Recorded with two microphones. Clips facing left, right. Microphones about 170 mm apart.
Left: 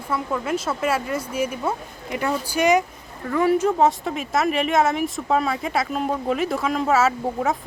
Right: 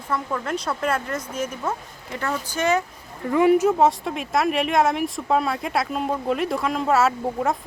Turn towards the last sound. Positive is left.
turn(degrees=0)  # may be behind; listen again after turning